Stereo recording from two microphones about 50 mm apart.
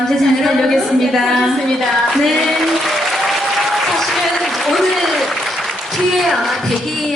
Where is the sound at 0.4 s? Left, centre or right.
Centre.